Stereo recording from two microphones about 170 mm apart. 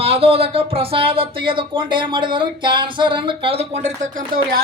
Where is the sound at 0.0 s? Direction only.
35° right (ahead or behind).